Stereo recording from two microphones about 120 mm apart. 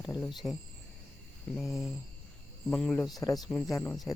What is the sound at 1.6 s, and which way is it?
Speech, centre (ahead or behind).